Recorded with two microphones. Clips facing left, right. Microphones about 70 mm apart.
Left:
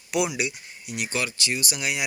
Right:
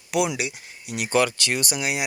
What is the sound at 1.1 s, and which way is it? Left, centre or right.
Speech, right.